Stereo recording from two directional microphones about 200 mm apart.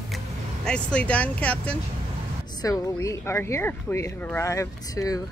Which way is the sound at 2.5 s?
20° left (ahead or behind).